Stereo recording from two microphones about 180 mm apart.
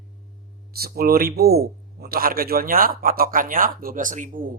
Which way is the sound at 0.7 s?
55° right (ahead or behind).